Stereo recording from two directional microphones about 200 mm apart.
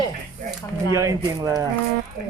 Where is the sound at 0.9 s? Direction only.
15° right (ahead or behind).